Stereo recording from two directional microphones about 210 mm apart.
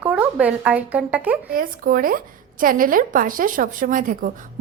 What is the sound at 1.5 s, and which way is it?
A woman's voice, 40° right (ahead or behind).